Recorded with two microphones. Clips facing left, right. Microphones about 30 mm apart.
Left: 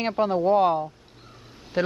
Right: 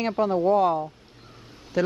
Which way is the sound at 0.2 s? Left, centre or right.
Left.